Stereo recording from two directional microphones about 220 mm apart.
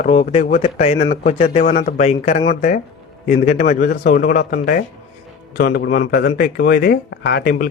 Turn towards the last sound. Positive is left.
turn(degrees=45)  # may be behind; listen again after turning